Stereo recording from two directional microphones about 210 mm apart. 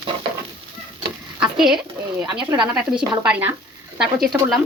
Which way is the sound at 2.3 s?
20° right (ahead or behind).